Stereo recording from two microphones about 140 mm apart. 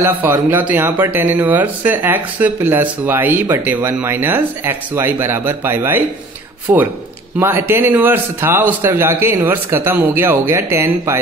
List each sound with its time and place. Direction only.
0.0 s speech: 15° right (ahead or behind)